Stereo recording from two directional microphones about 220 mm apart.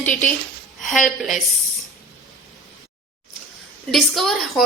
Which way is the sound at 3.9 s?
Centre (ahead or behind).